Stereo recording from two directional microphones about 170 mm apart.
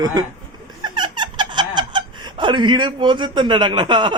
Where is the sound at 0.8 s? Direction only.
25° right (ahead or behind).